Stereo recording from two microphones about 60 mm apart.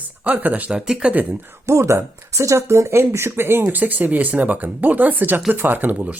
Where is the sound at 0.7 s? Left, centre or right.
Centre.